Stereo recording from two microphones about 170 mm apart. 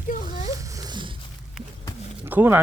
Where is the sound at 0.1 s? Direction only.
50° left (ahead or behind).